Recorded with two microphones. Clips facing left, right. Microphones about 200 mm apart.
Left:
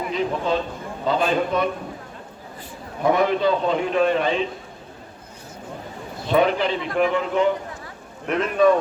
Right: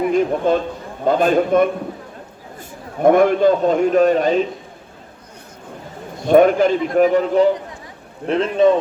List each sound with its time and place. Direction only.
0.1 s a sound: 50° right (ahead or behind)
1.0 s a man's voice: 50° right (ahead or behind)
6.2 s a man's voice: 50° right (ahead or behind)
8.3 s speech: 25° right (ahead or behind)